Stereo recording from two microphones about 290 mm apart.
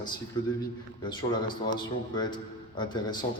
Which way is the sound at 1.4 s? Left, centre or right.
Centre.